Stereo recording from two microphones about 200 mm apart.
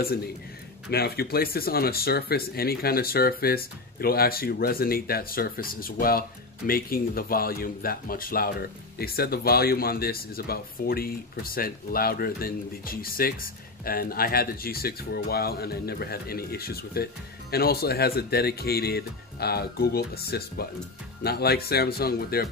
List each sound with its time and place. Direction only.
0.8 s speech: 55° left (ahead or behind)